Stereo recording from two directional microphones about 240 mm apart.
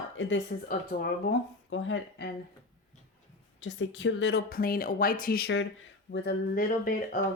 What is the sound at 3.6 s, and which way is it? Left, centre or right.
Speech, left.